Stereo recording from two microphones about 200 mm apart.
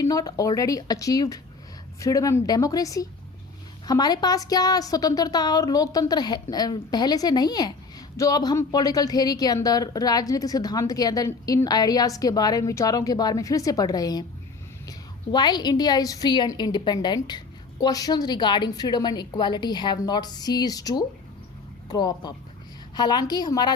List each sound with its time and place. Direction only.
0.0 s a woman's voice: 15° left (ahead or behind)